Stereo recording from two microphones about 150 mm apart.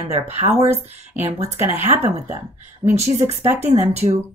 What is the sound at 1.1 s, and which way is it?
Speech, 45° right (ahead or behind).